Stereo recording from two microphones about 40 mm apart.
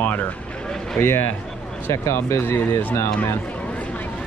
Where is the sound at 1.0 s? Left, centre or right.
Left.